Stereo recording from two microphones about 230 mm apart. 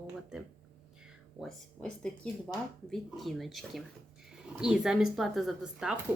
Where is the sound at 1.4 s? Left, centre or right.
Centre.